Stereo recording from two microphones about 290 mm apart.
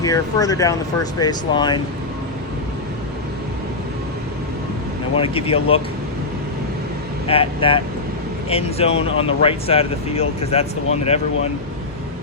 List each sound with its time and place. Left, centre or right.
0.0 s speech: centre
5.1 s speech: centre
7.3 s speech: centre